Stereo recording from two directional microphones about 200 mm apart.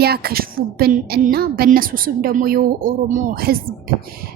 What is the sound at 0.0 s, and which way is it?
A woman's voice, 50° right (ahead or behind).